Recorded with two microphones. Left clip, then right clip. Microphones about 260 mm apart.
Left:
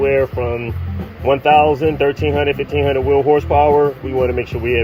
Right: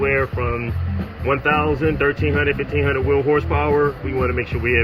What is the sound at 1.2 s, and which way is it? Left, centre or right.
Speech, centre.